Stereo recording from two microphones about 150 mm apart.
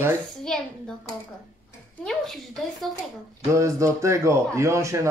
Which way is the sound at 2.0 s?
Centre (ahead or behind).